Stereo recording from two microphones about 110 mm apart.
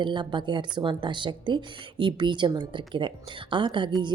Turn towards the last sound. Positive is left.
turn(degrees=-50)  # may be behind; listen again after turning